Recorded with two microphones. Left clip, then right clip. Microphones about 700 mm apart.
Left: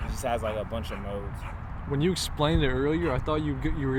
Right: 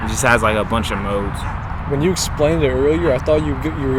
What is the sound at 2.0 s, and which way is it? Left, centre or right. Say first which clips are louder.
Speech: right 10 dB; left.